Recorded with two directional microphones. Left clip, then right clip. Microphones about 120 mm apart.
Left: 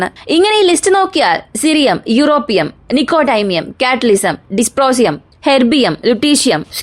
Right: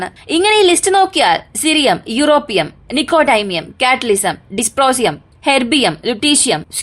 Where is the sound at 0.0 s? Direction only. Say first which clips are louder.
Left 3 dB; 35° left (ahead or behind).